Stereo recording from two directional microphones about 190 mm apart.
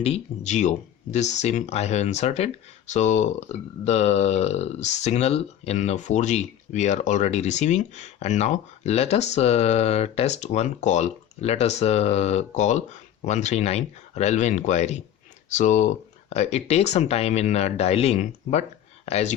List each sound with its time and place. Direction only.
0.0 s speech: 35° left (ahead or behind)